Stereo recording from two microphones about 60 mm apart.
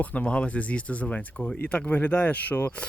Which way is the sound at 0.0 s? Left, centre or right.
Left.